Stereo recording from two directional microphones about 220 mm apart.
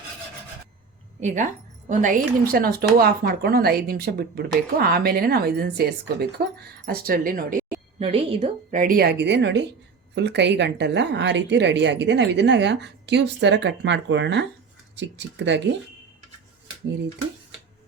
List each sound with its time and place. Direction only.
1.2 s a woman's voice: 35° right (ahead or behind)
7.9 s a woman's voice: 25° right (ahead or behind)
8.8 s speech: 40° right (ahead or behind)